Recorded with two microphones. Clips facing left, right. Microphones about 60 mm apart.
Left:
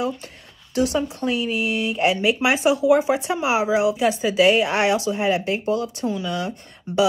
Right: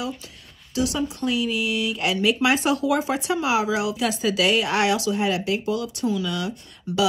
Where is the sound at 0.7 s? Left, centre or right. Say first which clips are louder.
Left 3 dB; left.